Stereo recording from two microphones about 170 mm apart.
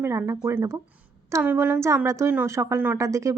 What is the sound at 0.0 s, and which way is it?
A woman's voice, 15° right (ahead or behind).